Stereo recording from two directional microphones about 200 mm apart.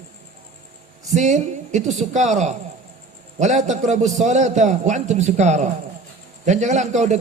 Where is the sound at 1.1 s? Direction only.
35° right (ahead or behind).